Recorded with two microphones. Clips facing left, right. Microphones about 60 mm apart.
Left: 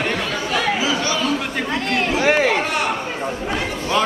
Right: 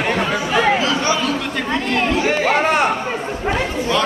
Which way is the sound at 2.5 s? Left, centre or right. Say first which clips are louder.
Right 5 dB; right.